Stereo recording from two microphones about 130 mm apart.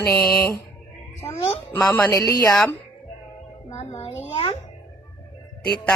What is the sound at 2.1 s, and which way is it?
Mantra, 25° left (ahead or behind).